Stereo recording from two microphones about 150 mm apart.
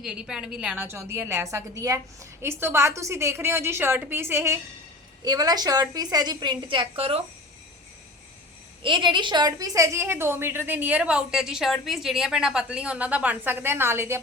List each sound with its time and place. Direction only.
0.0 s a woman's voice: 5° right (ahead or behind)
0.9 s a woman's voice: 15° right (ahead or behind); by 7.3 s 40° right (ahead or behind)
8.8 s a woman's voice: 35° right (ahead or behind); by 14.2 s 15° right (ahead or behind)